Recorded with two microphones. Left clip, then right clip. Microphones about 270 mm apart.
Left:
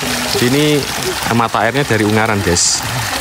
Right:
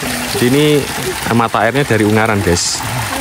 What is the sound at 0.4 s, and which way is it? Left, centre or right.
Speech, centre.